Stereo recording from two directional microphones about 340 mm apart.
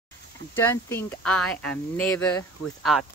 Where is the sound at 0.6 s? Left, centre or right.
Centre.